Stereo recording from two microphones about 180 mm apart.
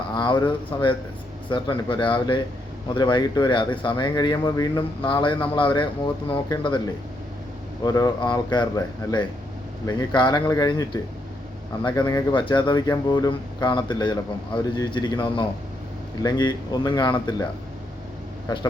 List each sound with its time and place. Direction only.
0.1 s speech: 25° left (ahead or behind)
7.9 s speech: 20° left (ahead or behind)